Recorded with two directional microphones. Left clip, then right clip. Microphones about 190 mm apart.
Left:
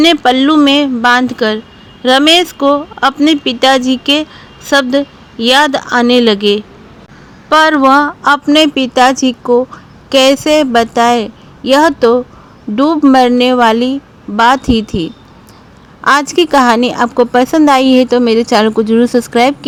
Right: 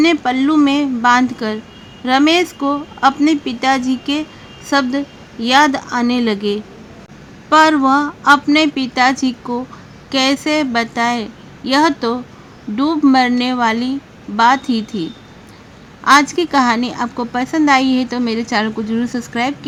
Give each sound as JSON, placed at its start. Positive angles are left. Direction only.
{"t": 0.0, "sound": "a woman's voice", "side_deg": 25}